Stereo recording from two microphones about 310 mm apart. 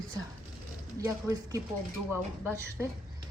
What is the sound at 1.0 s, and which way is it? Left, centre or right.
Speech, centre.